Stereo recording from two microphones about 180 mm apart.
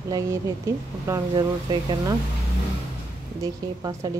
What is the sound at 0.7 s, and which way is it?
A woman's voice, 15° right (ahead or behind).